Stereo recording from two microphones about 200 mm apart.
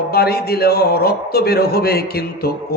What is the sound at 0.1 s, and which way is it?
A man's voice, 50° left (ahead or behind).